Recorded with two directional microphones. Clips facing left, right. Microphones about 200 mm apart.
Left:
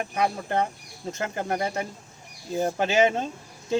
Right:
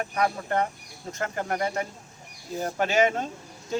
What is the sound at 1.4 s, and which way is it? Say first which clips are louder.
Speech: even; 25° left (ahead or behind).